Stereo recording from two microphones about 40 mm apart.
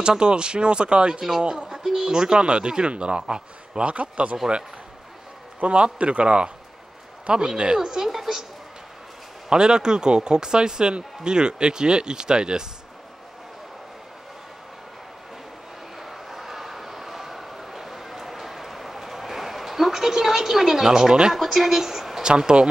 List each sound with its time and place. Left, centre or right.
0.0 s speech: right
5.6 s speech: right; by 8.5 s centre
9.5 s speech: centre
16.0 s a sound: centre
21.4 s speech: centre
22.2 s speech: right